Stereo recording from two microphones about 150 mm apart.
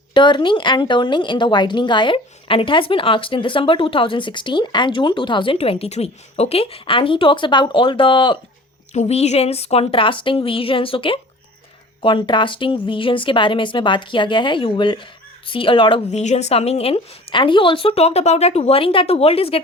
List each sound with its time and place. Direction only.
0.1 s speech: 30° left (ahead or behind)
8.9 s speech: 50° left (ahead or behind)
16.0 s a woman's voice: 50° left (ahead or behind)